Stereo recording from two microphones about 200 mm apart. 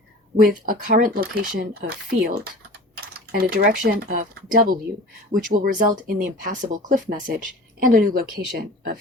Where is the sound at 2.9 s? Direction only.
50° right (ahead or behind).